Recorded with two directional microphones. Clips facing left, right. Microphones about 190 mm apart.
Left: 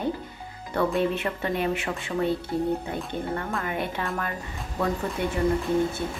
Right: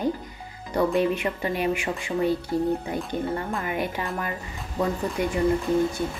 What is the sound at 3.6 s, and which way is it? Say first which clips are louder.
Speech: right 1 dB; 10° right (ahead or behind).